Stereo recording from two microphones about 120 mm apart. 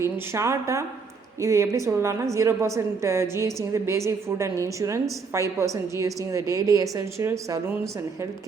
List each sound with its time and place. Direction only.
0.0 s a woman's voice: 25° right (ahead or behind)